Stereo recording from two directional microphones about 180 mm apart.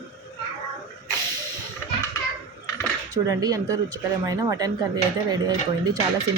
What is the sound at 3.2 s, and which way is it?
A woman's voice, 20° right (ahead or behind).